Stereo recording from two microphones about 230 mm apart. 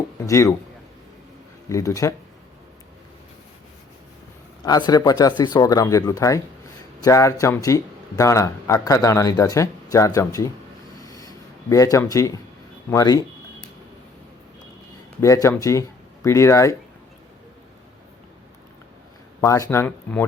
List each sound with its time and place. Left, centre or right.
0.3 s speech: centre
1.7 s speech: centre
4.6 s speech: centre
11.0 s a sound: centre
12.9 s speech: centre
15.2 s speech: centre
19.4 s speech: centre